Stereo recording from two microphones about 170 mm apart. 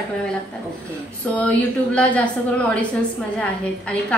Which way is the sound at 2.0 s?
10° left (ahead or behind).